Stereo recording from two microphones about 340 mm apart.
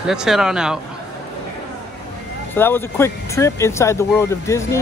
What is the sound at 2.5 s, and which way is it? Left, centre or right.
Speech, centre.